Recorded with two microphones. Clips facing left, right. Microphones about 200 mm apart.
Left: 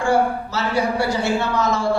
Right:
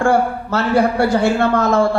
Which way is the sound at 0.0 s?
55° right (ahead or behind).